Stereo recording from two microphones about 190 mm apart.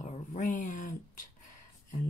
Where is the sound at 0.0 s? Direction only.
40° left (ahead or behind).